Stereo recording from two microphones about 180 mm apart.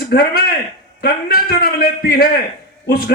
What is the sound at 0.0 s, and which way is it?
Speech, 60° left (ahead or behind).